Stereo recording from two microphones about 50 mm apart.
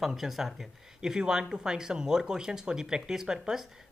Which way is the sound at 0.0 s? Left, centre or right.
Centre.